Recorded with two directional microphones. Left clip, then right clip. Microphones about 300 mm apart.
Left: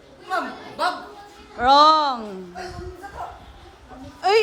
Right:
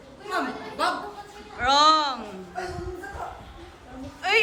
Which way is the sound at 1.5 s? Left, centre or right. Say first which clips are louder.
Left 5 dB; centre.